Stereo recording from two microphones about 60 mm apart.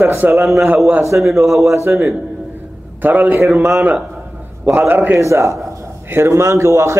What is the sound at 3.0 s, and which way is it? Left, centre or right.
Speech, right.